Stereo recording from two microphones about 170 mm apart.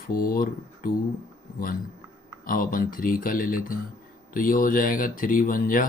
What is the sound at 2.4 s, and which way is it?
Speech, 55° left (ahead or behind).